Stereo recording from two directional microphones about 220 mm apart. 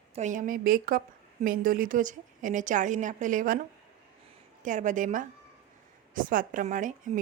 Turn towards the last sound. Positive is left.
turn(degrees=-35)  # may be behind; listen again after turning